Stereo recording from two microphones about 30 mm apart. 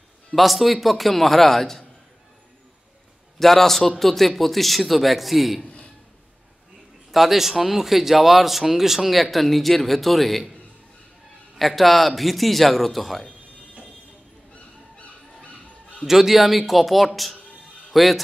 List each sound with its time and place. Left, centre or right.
0.3 s speech: centre
3.3 s a man's voice: centre
7.1 s speech: centre
11.5 s a man's voice: centre
16.1 s speech: centre